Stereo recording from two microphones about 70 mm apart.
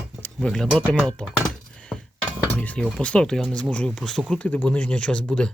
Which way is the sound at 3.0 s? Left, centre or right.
Centre.